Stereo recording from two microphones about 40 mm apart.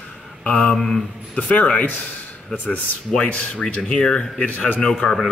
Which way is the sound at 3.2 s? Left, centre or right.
Left.